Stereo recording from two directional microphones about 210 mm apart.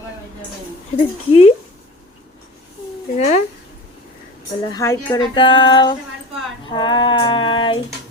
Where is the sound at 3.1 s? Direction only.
30° left (ahead or behind).